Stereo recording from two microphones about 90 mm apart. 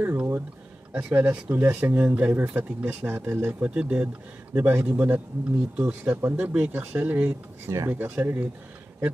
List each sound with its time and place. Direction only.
0.0 s a sound: 25° right (ahead or behind)
0.9 s speech: 15° right (ahead or behind)
3.1 s speech: 25° right (ahead or behind)
3.6 s speech: 15° right (ahead or behind)